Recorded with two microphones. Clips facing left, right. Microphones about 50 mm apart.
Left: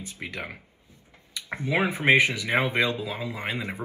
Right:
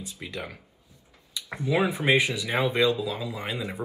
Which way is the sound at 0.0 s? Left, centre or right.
Left.